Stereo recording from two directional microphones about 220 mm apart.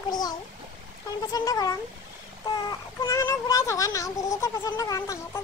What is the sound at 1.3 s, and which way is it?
Speech, 15° left (ahead or behind).